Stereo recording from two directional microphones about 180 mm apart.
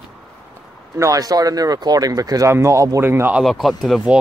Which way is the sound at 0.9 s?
20° right (ahead or behind).